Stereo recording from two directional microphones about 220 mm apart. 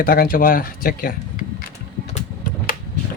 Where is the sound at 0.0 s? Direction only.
40° left (ahead or behind).